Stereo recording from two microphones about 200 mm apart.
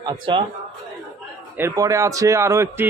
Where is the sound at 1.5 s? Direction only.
15° right (ahead or behind).